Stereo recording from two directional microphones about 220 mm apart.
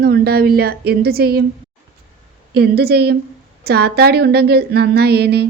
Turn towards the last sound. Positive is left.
turn(degrees=-45)  # may be behind; listen again after turning